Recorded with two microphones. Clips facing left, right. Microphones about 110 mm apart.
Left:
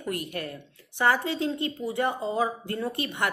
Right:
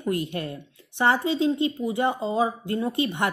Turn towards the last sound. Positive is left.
turn(degrees=-20)  # may be behind; listen again after turning